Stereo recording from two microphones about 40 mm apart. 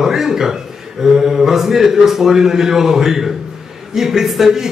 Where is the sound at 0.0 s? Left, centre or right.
Centre.